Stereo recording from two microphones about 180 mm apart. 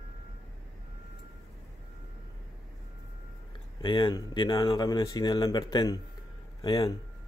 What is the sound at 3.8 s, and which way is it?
Speech, 30° left (ahead or behind).